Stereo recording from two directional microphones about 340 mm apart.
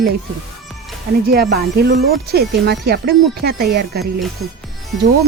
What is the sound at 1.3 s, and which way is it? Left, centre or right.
Speech, right.